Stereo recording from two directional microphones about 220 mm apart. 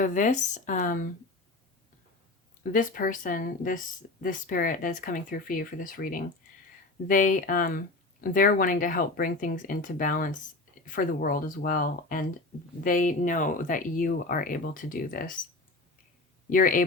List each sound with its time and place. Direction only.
0.0 s speech: 35° left (ahead or behind)
2.7 s speech: 40° left (ahead or behind)
16.5 s speech: 40° left (ahead or behind)